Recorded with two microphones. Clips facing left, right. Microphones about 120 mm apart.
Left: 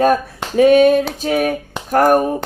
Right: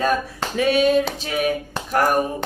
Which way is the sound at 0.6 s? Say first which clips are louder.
Left 7 dB; 50° left (ahead or behind).